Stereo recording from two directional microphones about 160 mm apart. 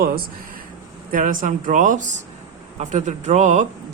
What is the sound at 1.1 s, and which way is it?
Speech, 55° right (ahead or behind).